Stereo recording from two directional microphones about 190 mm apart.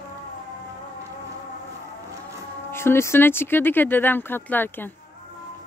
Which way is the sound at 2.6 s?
10° left (ahead or behind).